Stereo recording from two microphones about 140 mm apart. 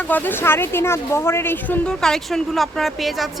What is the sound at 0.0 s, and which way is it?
Speech, 15° left (ahead or behind).